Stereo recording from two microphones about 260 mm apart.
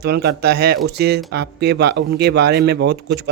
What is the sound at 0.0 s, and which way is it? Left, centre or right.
Speech, right.